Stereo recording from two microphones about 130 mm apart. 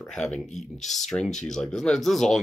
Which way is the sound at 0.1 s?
5° left (ahead or behind).